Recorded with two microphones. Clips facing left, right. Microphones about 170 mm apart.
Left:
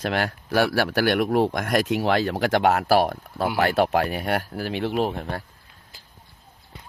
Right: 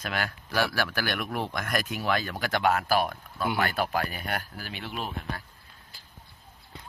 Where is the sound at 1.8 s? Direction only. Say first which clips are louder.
Left 8 dB; 85° left.